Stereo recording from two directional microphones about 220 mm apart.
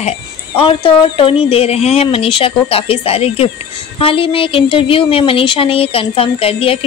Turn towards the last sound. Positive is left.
turn(degrees=25)  # may be behind; listen again after turning